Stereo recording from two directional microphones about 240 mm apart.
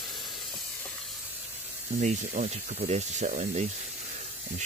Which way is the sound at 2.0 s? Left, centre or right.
Right.